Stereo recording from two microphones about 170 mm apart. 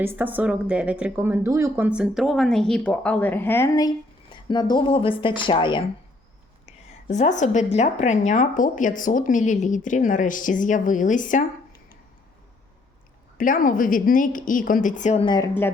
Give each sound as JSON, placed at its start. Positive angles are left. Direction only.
{"t": 0.0, "sound": "speech", "side_deg": -10}
{"t": 7.1, "sound": "speech", "side_deg": 45}
{"t": 13.4, "sound": "speech", "side_deg": 55}
{"t": 15.2, "sound": "speech", "side_deg": 25}